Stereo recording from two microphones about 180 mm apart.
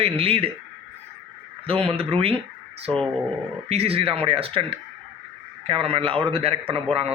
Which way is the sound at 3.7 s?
35° right (ahead or behind).